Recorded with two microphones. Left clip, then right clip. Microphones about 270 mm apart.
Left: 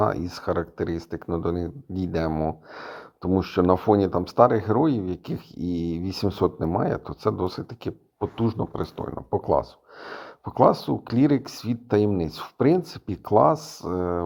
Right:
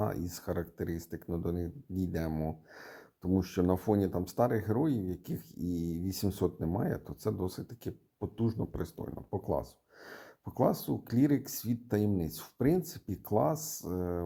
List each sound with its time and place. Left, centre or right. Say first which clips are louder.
0.0 s speech: left 12 dB; centre